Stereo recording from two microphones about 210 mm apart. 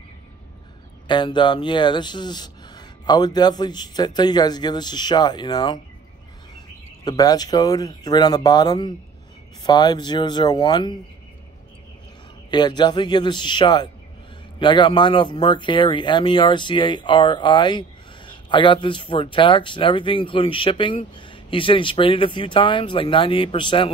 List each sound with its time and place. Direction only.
1.0 s speech: 20° left (ahead or behind)
7.1 s speech: 20° left (ahead or behind)
12.4 s speech: 20° left (ahead or behind)